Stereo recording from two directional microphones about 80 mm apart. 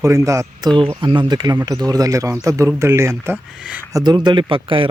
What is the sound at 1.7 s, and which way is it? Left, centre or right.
Speech, right.